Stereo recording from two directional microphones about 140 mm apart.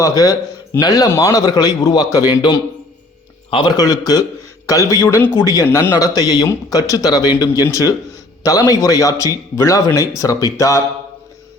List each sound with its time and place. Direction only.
0.0 s a man's voice: 25° left (ahead or behind)